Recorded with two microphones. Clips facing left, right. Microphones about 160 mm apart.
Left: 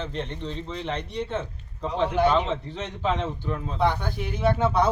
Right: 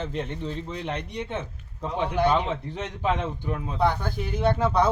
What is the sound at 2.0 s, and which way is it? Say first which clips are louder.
Speech: left 1 dB; centre (ahead or behind).